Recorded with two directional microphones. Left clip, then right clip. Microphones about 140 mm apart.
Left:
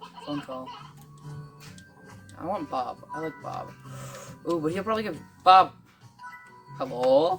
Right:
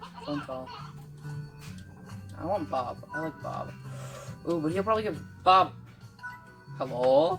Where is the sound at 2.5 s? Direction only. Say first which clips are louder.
Even; 90° left.